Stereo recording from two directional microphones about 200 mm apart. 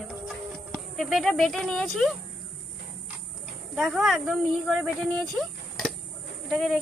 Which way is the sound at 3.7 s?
Centre (ahead or behind).